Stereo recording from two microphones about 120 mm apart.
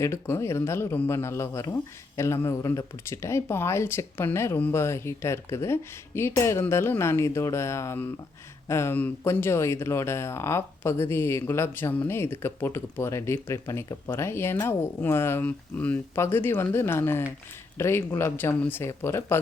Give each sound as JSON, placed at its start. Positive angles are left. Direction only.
{"t": 0.0, "sound": "speech", "side_deg": 20}